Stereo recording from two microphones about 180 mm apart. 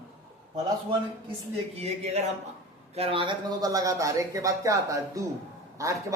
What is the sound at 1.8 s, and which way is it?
Speech, 35° right (ahead or behind).